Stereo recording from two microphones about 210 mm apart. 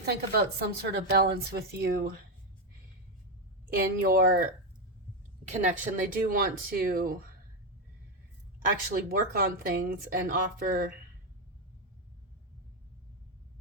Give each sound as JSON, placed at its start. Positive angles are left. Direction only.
{"t": 0.0, "sound": "a woman's voice", "side_deg": -50}
{"t": 3.7, "sound": "a woman's voice", "side_deg": -45}
{"t": 5.5, "sound": "speech", "side_deg": -35}
{"t": 8.9, "sound": "a woman's voice", "side_deg": -45}